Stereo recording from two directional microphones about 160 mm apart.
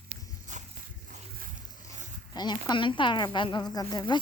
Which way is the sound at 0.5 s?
50° right (ahead or behind).